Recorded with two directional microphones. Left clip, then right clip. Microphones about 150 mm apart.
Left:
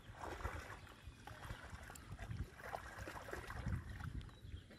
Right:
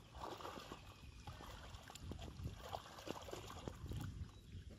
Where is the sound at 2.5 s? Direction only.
10° left (ahead or behind).